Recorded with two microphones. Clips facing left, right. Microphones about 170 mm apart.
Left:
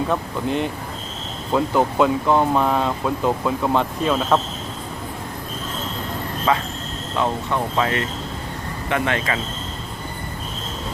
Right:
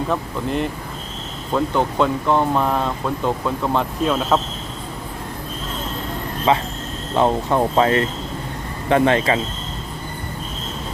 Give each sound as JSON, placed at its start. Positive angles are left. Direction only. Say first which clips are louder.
{"t": 0.1, "sound": "speech", "louder": "even", "side_deg": 0}
{"t": 6.5, "sound": "speech", "louder": "right 3 dB", "side_deg": -25}
{"t": 7.2, "sound": "speech", "louder": "right 5 dB", "side_deg": -35}